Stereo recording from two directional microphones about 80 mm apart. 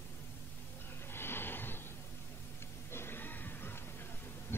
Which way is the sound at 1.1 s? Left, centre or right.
Left.